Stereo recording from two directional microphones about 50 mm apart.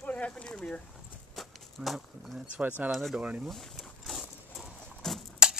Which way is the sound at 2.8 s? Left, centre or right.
Right.